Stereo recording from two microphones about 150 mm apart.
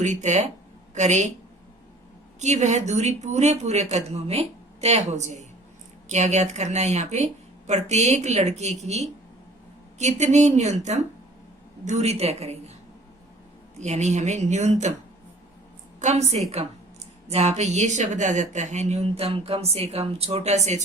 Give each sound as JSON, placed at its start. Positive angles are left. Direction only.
{"t": 0.0, "sound": "speech", "side_deg": -50}
{"t": 2.4, "sound": "speech", "side_deg": -50}
{"t": 13.7, "sound": "speech", "side_deg": -50}
{"t": 16.0, "sound": "a woman's voice", "side_deg": -50}